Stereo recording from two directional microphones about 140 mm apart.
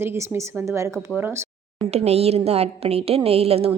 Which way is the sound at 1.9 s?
50° right (ahead or behind).